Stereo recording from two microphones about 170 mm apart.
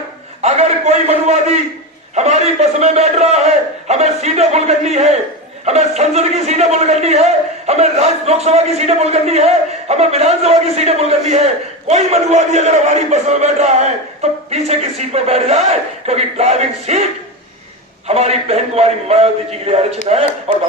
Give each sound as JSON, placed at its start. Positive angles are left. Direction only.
{"t": 0.4, "sound": "a man's voice", "side_deg": -40}
{"t": 18.1, "sound": "a man's voice", "side_deg": -40}